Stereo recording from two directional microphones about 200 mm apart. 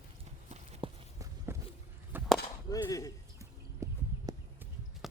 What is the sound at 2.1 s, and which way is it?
Chop, 10° right (ahead or behind).